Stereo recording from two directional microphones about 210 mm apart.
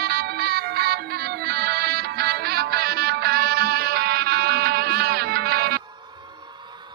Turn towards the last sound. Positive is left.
turn(degrees=-45)  # may be behind; listen again after turning